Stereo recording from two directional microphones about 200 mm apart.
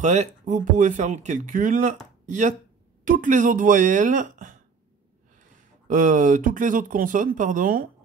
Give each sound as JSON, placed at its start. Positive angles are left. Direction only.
{"t": 0.0, "sound": "speech", "side_deg": -35}
{"t": 5.9, "sound": "speech", "side_deg": -40}